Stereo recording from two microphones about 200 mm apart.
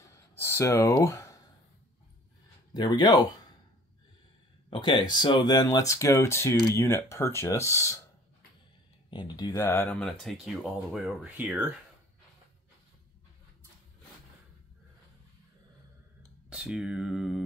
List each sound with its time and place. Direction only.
0.4 s speech: 10° left (ahead or behind)
2.7 s speech: 20° left (ahead or behind)
4.6 s speech: 25° left (ahead or behind)
9.1 s speech: 20° left (ahead or behind)
9.8 s speech: centre (ahead or behind)
16.4 s speech: 5° right (ahead or behind)